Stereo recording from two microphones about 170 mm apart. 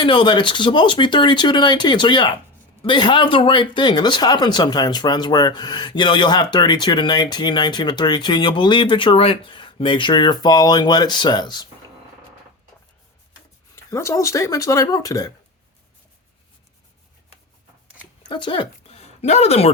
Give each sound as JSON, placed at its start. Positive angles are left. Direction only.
{"t": 0.0, "sound": "speech", "side_deg": 30}
{"t": 13.7, "sound": "speech", "side_deg": 15}
{"t": 18.3, "sound": "speech", "side_deg": 30}